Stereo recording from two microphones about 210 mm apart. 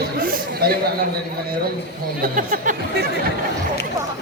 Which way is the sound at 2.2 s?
40° right (ahead or behind).